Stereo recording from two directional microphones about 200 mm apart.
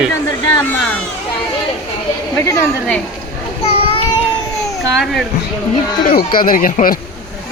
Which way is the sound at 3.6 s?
30° left (ahead or behind).